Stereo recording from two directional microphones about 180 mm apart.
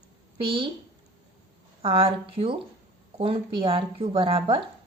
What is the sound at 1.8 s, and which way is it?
A woman's voice, 30° right (ahead or behind).